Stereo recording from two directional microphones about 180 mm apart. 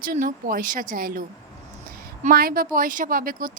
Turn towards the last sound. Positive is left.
turn(degrees=-50)  # may be behind; listen again after turning